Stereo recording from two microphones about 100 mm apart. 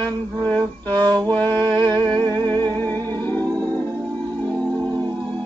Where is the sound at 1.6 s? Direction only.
45° right (ahead or behind).